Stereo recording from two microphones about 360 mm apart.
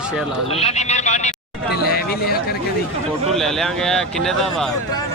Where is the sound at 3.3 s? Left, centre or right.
Centre.